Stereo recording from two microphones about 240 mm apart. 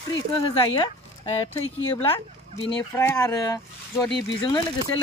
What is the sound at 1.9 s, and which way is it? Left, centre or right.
Speech, centre.